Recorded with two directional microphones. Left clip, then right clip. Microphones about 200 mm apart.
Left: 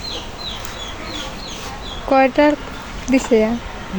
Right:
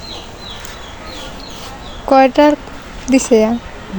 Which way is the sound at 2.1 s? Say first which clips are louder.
Right 4 dB; 20° right (ahead or behind).